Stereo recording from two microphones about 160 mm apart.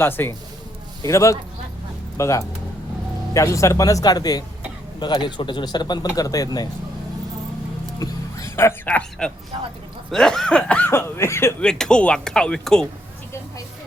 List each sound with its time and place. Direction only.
0.0 s speech: 15° left (ahead or behind)
7.9 s music: 20° left (ahead or behind)
10.1 s speech: 5° left (ahead or behind)
11.6 s speech: 5° left (ahead or behind)